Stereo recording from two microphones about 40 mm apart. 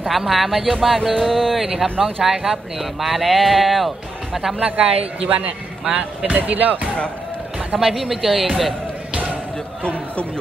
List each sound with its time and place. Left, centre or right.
0.1 s speech: centre
1.2 s speech: centre
1.8 s speech: centre
4.6 s speech: right
5.9 s speech: right
6.2 s speech: right
7.8 s speech: centre